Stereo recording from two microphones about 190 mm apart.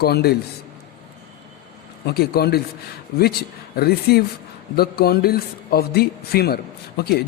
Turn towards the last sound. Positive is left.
turn(degrees=55)  # may be behind; listen again after turning